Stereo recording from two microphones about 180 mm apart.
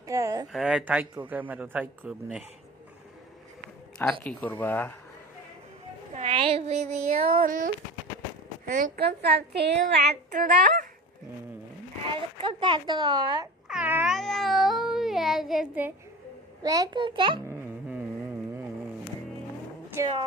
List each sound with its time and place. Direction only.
0.1 s a sound: 20° right (ahead or behind)
0.5 s a man's voice: 5° right (ahead or behind)
4.2 s speech: 10° left (ahead or behind)
6.1 s speech: 35° right (ahead or behind)
7.3 s a woman's voice: 50° right (ahead or behind); by 10.4 s 65° right (ahead or behind)
10.4 s speech: 45° right (ahead or behind)
12.0 s speech: 30° right (ahead or behind)
13.7 s meow: 5° right (ahead or behind)
16.6 s a child's voice: 20° right (ahead or behind)
17.5 s a sound: 10° right (ahead or behind)